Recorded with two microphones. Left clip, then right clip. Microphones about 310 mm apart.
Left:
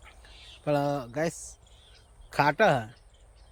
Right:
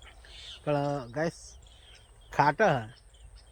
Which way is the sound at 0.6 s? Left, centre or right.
Centre.